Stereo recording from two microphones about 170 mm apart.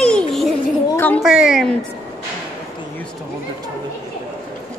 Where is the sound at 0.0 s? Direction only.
5° left (ahead or behind).